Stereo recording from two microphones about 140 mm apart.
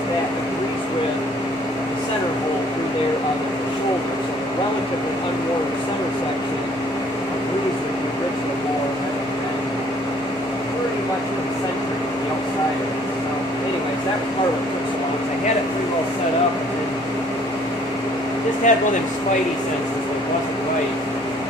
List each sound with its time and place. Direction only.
18.7 s speech: 65° left (ahead or behind)